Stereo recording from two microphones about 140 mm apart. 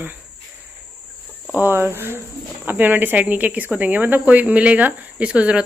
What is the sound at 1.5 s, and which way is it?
Speech, 15° right (ahead or behind).